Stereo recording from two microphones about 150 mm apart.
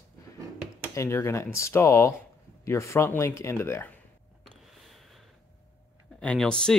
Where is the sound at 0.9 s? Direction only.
20° left (ahead or behind).